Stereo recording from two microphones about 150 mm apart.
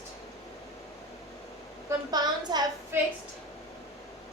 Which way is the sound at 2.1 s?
25° right (ahead or behind).